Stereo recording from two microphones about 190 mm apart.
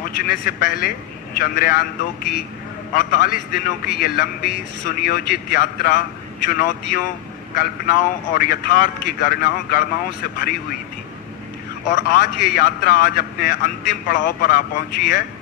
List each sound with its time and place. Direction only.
0.0 s a man's voice: 50° left (ahead or behind)
12.1 s a man's voice: 45° left (ahead or behind)